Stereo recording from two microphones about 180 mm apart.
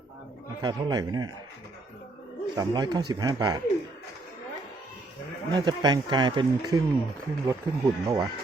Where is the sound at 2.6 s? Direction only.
20° right (ahead or behind).